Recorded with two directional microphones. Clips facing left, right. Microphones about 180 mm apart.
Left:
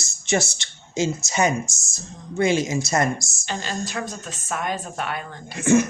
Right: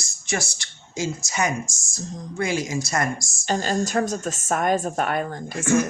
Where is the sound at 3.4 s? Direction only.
45° right (ahead or behind).